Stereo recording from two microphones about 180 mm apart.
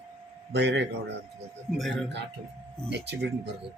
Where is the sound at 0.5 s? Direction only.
70° right (ahead or behind).